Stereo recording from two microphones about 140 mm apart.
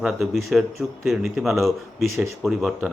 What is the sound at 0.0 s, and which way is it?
Speech, centre (ahead or behind).